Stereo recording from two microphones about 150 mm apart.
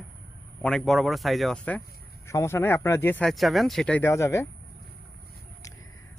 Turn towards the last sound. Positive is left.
turn(degrees=20)  # may be behind; listen again after turning